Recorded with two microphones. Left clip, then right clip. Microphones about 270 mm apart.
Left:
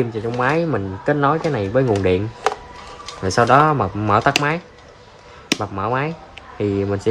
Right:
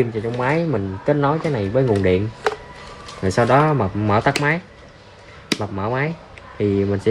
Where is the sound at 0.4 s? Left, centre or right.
Centre.